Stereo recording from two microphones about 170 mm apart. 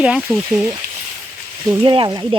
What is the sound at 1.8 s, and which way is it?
Speech, 30° right (ahead or behind).